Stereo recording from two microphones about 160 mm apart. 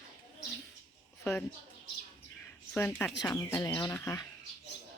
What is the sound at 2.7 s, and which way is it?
Speech, 10° left (ahead or behind).